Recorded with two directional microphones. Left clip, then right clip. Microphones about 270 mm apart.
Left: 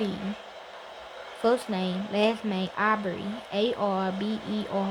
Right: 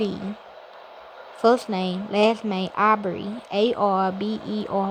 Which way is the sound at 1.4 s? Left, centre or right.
Centre.